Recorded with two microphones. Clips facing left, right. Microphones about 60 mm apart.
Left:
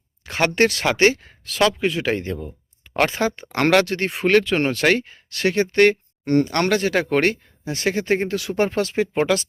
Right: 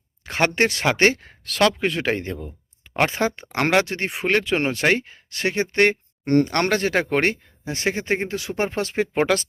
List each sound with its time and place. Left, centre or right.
0.3 s speech: right
3.5 s speech: centre; by 9.5 s right